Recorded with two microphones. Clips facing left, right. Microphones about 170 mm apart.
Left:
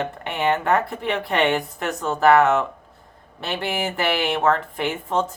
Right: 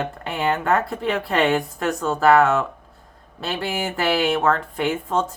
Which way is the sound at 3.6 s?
20° left (ahead or behind).